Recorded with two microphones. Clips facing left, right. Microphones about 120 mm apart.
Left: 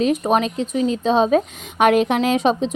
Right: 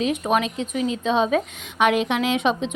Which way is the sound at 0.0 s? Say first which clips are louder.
Left 4 dB; 40° left (ahead or behind).